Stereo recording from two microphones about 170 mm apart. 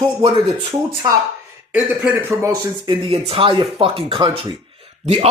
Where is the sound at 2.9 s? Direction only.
35° right (ahead or behind).